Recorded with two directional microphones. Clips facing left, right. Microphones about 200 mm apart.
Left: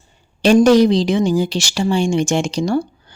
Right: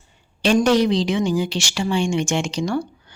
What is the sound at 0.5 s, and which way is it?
Speech, 40° left (ahead or behind).